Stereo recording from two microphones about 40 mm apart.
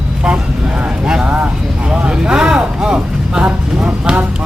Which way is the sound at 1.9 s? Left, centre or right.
Right.